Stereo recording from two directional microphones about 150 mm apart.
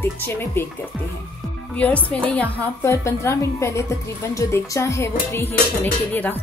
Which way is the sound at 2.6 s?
20° left (ahead or behind).